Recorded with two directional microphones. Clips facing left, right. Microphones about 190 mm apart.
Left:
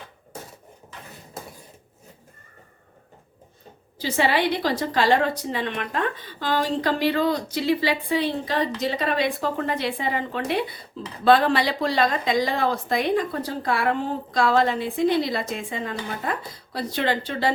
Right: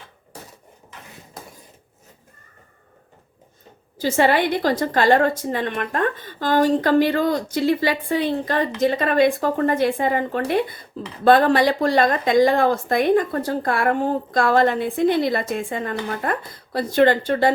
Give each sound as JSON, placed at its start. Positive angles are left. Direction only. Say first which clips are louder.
{"t": 3.9, "sound": "a woman's voice", "louder": "right 4 dB", "side_deg": -50}